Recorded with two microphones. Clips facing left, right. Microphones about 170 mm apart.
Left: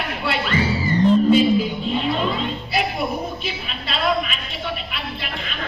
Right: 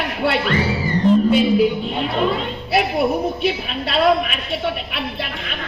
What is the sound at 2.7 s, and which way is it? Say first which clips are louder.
A man's voice: right 8 dB; 70° right (ahead or behind).